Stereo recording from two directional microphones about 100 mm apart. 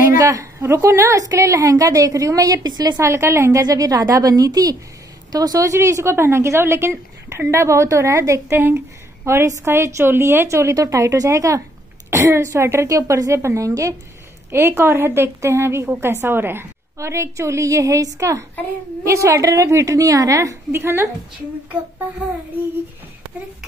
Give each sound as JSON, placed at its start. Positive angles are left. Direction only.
{"t": 0.0, "sound": "a woman's voice", "side_deg": -30}
{"t": 3.0, "sound": "a woman's voice", "side_deg": -30}